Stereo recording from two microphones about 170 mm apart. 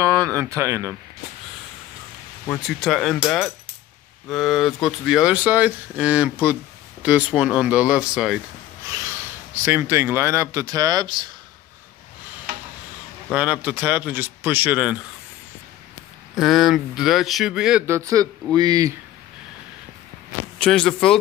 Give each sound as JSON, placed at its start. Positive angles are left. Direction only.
{"t": 0.0, "sound": "speech", "side_deg": -20}
{"t": 2.8, "sound": "speech", "side_deg": 0}
{"t": 9.7, "sound": "speech", "side_deg": -15}
{"t": 13.3, "sound": "speech", "side_deg": -5}
{"t": 16.3, "sound": "speech", "side_deg": 0}
{"t": 17.8, "sound": "a man's voice", "side_deg": -15}
{"t": 20.5, "sound": "speech", "side_deg": 5}